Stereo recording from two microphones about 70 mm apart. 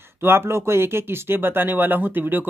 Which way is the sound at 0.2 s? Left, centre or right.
Right.